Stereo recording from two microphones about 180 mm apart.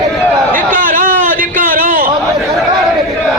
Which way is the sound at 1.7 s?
50° right (ahead or behind).